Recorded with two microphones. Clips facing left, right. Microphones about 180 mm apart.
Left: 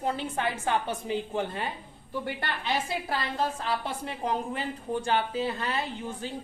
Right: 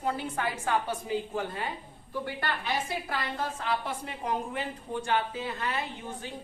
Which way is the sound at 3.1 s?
30° left (ahead or behind).